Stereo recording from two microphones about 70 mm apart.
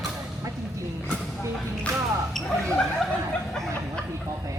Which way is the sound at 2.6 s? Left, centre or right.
Centre.